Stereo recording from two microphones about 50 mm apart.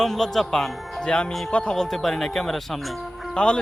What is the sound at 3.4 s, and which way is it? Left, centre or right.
Speech, centre.